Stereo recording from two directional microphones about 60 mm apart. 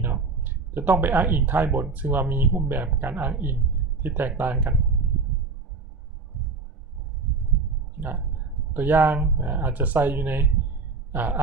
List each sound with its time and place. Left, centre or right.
0.0 s a sound: right
1.0 s speech: right
8.7 s a woman's voice: right